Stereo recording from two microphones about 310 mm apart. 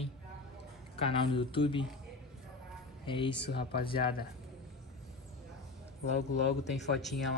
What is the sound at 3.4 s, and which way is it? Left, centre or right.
Speech, left.